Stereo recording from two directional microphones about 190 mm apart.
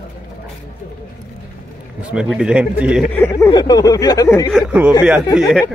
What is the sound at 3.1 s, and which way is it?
Speech, 10° left (ahead or behind).